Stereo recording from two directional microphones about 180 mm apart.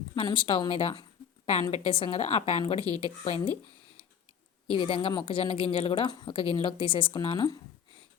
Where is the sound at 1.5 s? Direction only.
40° left (ahead or behind).